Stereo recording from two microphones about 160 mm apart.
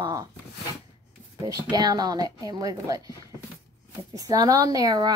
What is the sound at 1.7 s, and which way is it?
Speech, 25° right (ahead or behind).